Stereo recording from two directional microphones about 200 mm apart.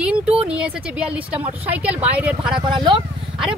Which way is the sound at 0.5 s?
5° right (ahead or behind).